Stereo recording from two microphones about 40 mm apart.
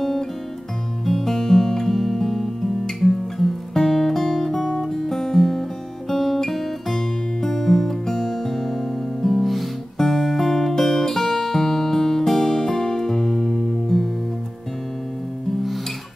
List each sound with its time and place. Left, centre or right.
1.0 s music: centre